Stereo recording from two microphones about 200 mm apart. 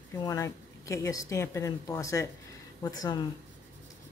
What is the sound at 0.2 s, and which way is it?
Speech, 15° left (ahead or behind).